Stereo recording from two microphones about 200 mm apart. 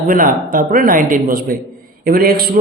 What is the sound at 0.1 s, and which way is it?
Speech, 45° right (ahead or behind).